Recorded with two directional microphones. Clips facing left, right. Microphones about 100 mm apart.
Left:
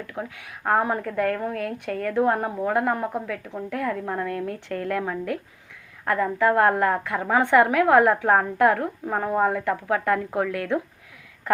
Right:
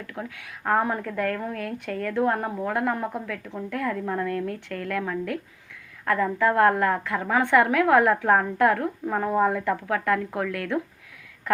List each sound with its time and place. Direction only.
0.1 s a woman's voice: 15° left (ahead or behind)